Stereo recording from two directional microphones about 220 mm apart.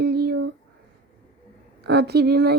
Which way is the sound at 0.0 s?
50° right (ahead or behind).